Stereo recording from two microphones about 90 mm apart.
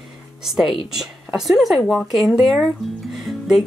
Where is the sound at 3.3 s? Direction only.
Centre (ahead or behind).